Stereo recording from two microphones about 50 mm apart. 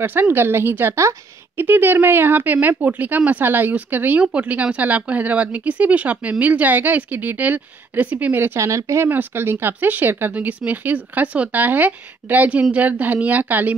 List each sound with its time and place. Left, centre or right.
0.0 s speech: right
4.2 s speech: right
8.5 s speech: right
9.1 s speech: right
10.3 s speech: right